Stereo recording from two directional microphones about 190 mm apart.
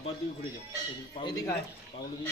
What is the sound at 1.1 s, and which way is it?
Speech, 20° left (ahead or behind).